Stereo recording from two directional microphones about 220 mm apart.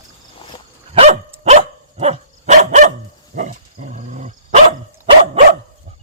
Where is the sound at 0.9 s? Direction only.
30° right (ahead or behind).